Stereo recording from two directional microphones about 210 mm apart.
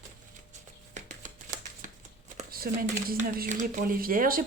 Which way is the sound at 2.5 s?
45° right (ahead or behind).